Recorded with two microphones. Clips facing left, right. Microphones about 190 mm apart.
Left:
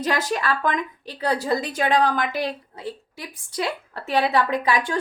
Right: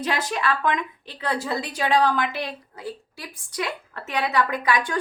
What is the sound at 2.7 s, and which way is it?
A woman's voice, 25° left (ahead or behind).